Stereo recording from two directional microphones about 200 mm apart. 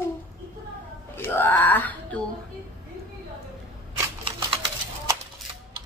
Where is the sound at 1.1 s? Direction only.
10° left (ahead or behind).